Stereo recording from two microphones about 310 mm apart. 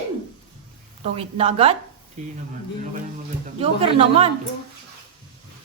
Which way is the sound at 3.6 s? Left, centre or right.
Centre.